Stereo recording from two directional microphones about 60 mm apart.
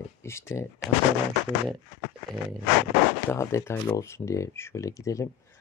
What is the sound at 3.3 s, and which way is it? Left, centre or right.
Speech, left.